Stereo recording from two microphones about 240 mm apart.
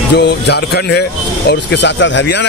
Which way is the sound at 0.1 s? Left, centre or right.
Left.